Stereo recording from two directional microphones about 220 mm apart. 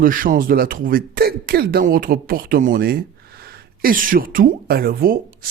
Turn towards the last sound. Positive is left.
turn(degrees=-40)  # may be behind; listen again after turning